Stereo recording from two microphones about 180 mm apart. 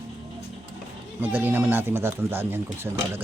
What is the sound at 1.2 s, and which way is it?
Speech, 10° right (ahead or behind).